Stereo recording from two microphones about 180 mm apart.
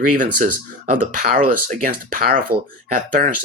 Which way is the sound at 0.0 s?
50° right (ahead or behind).